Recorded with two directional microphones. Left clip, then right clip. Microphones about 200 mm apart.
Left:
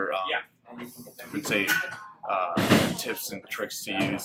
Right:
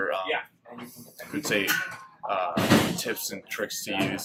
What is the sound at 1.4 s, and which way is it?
Speech, 10° right (ahead or behind).